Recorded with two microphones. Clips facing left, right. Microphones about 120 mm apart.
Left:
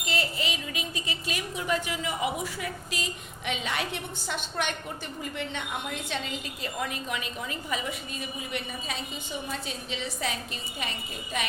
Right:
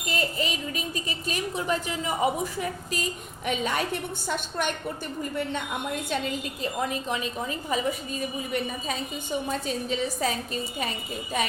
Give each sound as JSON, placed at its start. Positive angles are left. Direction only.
{"t": 0.0, "sound": "a woman's voice", "side_deg": -45}